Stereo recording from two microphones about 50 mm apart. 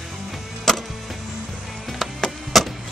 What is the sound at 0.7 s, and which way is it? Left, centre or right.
Wood, centre.